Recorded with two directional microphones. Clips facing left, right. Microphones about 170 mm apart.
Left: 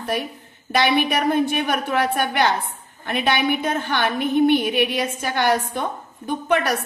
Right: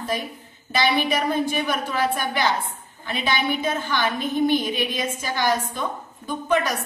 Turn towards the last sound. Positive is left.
turn(degrees=60)  # may be behind; listen again after turning